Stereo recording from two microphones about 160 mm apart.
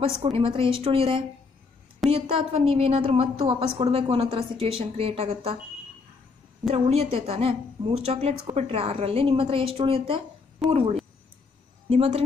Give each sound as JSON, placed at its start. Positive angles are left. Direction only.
{"t": 0.0, "sound": "a woman's voice", "side_deg": -35}
{"t": 6.7, "sound": "a woman's voice", "side_deg": -40}